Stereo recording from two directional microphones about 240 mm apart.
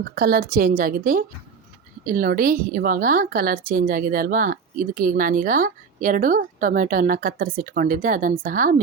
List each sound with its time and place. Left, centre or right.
0.0 s a woman's voice: right